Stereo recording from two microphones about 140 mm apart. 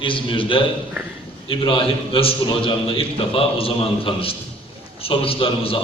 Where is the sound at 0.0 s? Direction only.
35° left (ahead or behind).